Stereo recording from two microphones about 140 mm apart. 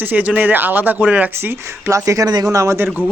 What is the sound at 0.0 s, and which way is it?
A man's voice, 10° right (ahead or behind).